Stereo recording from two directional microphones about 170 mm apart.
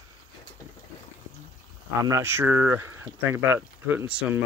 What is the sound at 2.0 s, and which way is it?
Speech, 15° right (ahead or behind).